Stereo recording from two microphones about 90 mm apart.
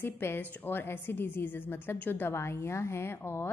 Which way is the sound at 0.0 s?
25° left (ahead or behind).